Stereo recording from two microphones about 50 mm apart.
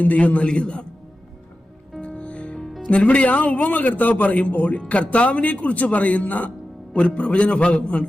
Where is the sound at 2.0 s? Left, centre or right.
Left.